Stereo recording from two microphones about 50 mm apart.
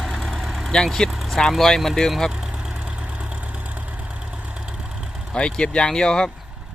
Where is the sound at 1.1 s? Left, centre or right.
Centre.